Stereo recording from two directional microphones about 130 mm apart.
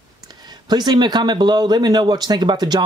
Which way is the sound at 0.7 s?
30° right (ahead or behind).